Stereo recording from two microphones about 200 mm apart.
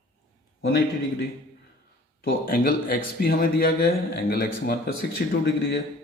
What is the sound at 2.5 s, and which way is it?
A man's voice, 45° left (ahead or behind).